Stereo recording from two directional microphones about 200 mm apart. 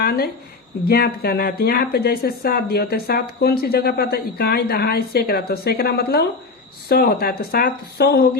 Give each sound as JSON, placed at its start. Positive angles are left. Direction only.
{"t": 0.0, "sound": "a woman's voice", "side_deg": 55}